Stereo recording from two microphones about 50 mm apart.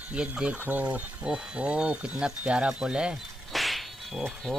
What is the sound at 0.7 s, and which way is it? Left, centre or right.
Speech, right.